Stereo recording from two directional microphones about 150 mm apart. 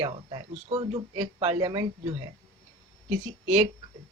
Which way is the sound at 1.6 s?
30° right (ahead or behind).